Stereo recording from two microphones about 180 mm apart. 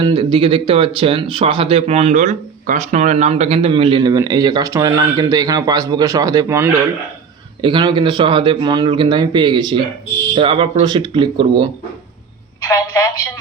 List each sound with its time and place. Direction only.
0.0 s speech: 30° right (ahead or behind)
7.6 s speech: 25° right (ahead or behind)
12.6 s telephone: 15° left (ahead or behind)